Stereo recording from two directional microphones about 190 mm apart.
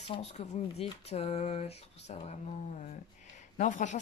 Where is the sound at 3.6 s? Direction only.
40° left (ahead or behind).